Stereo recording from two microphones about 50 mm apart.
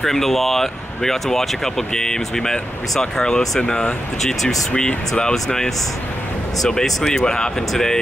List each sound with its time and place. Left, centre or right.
0.0 s speech: centre
4.7 s speech: centre
6.7 s speech: centre